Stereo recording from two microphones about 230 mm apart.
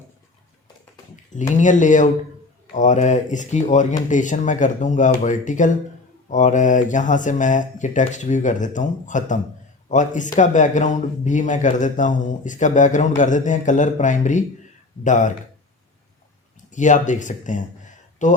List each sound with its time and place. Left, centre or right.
1.1 s a man's voice: left
16.7 s speech: left